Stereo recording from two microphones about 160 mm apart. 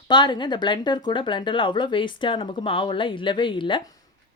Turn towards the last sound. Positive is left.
turn(degrees=30)  # may be behind; listen again after turning